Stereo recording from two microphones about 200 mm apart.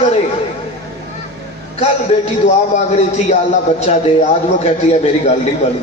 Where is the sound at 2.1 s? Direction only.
30° left (ahead or behind).